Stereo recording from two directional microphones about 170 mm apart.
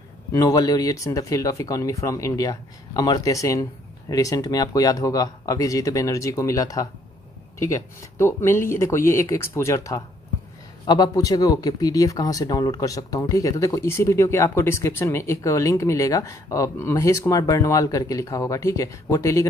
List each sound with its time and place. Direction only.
0.3 s speech: 20° left (ahead or behind)